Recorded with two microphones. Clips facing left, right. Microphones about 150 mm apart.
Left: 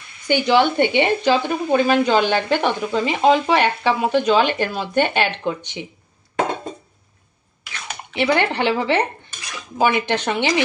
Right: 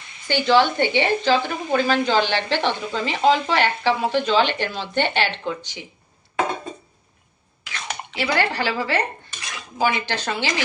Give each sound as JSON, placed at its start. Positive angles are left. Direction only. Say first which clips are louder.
{"t": 0.3, "sound": "speech", "louder": "left 1 dB", "side_deg": 15}
{"t": 8.2, "sound": "a woman's voice", "louder": "left 4 dB", "side_deg": 20}